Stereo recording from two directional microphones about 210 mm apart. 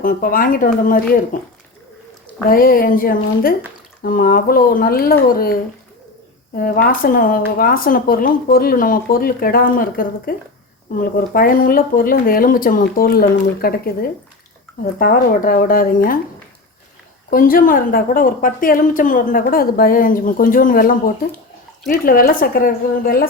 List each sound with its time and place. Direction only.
0.0 s a woman's voice: 40° left (ahead or behind)
2.5 s speech: 45° left (ahead or behind)
6.6 s a woman's voice: 40° left (ahead or behind)
17.3 s a woman's voice: 40° left (ahead or behind)